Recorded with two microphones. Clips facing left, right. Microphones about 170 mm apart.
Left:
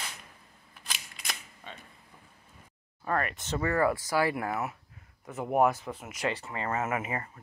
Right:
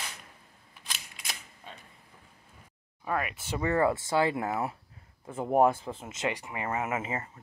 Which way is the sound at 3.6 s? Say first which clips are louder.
Right 1 dB; 25° right (ahead or behind).